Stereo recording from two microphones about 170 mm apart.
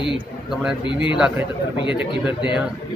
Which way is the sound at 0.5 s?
5° right (ahead or behind).